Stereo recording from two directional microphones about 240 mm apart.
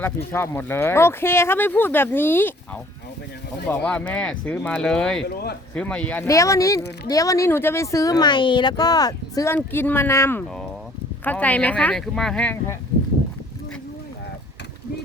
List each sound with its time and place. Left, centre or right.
0.3 s speech: centre
3.7 s speech: centre
5.3 s speech: left
5.7 s speech: centre